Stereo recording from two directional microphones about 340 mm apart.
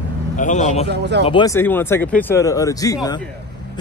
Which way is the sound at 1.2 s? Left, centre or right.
Centre.